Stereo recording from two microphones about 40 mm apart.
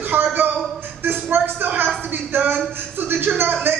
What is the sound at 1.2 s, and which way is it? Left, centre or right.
Speech, right.